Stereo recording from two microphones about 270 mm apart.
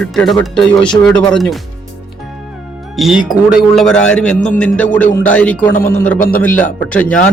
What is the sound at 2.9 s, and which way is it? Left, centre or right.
Speech, centre.